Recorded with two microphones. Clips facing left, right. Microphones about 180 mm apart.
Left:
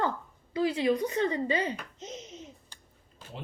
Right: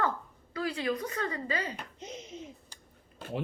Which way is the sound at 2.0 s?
10° right (ahead or behind).